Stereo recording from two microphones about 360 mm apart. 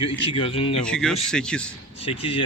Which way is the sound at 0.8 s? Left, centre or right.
Centre.